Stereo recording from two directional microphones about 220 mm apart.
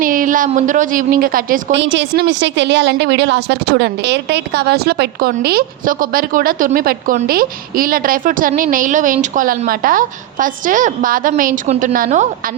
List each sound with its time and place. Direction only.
0.0 s a woman's voice: 40° right (ahead or behind)
1.7 s a woman's voice: 55° right (ahead or behind); by 12.2 s 35° right (ahead or behind)